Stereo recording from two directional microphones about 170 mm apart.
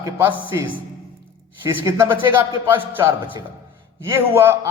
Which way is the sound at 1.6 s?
15° right (ahead or behind).